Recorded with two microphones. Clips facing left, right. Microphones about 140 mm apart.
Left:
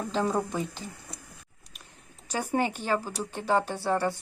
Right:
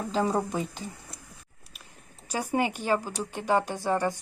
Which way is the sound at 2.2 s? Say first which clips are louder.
Even; 10° right (ahead or behind).